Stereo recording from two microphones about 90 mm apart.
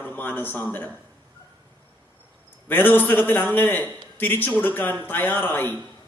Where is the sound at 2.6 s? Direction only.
20° left (ahead or behind).